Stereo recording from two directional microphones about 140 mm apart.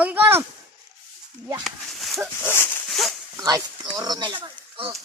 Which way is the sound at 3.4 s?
25° right (ahead or behind).